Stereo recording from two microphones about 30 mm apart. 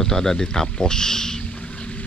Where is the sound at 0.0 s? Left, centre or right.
Centre.